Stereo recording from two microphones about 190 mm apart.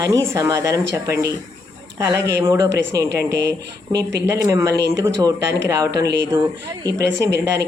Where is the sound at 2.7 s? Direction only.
60° right (ahead or behind).